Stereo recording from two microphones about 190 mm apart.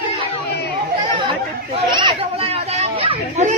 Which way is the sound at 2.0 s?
30° right (ahead or behind).